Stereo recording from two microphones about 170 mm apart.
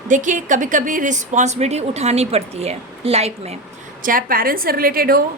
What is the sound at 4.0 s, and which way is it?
A woman's voice, 55° right (ahead or behind).